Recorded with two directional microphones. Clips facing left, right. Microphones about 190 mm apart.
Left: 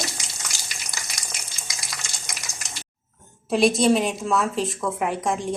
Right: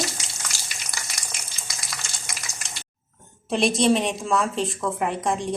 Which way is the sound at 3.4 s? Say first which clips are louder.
Left 2 dB; centre (ahead or behind).